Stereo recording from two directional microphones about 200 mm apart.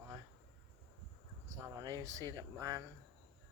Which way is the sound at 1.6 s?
20° right (ahead or behind).